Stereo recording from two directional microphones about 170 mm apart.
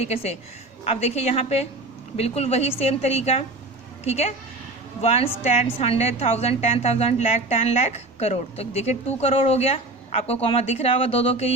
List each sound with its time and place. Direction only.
0.0 s a woman's voice: 35° left (ahead or behind)